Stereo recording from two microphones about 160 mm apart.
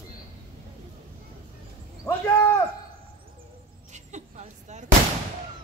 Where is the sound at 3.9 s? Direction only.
45° right (ahead or behind).